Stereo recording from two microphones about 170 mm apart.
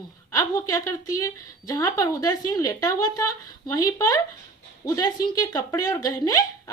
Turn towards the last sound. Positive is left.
turn(degrees=20)  # may be behind; listen again after turning